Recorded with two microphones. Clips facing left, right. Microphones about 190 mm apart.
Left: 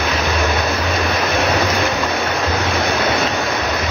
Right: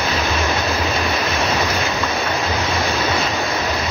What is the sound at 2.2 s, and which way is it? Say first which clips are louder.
Waves: left 2 dB; 65° left (ahead or behind).